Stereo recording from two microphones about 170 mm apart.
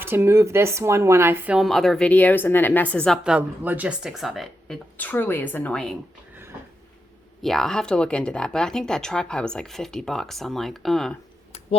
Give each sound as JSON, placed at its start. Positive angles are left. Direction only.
{"t": 0.0, "sound": "speech", "side_deg": -15}
{"t": 1.5, "sound": "speech", "side_deg": 0}
{"t": 3.2, "sound": "speech", "side_deg": -5}
{"t": 4.9, "sound": "speech", "side_deg": 10}
{"t": 7.4, "sound": "speech", "side_deg": 0}